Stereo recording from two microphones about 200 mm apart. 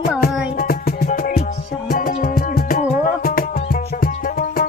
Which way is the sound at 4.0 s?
50° left (ahead or behind).